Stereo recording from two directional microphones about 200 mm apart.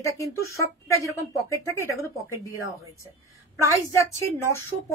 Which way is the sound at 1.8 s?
15° right (ahead or behind).